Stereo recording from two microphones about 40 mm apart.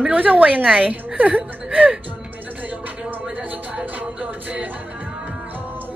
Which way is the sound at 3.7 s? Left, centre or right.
Right.